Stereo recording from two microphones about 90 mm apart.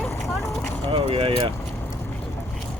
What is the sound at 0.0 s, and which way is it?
Vehicle, 35° left (ahead or behind).